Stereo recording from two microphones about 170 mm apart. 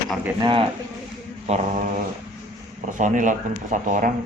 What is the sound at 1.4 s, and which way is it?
Mantra, 40° right (ahead or behind).